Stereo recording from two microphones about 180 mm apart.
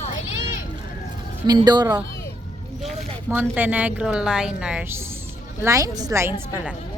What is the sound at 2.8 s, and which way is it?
Speech, 10° right (ahead or behind).